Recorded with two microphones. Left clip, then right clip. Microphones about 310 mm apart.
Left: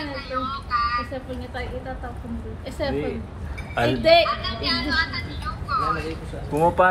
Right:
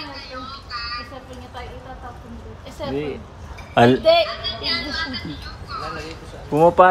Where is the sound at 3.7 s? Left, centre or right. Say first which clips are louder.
Right 8 dB; right.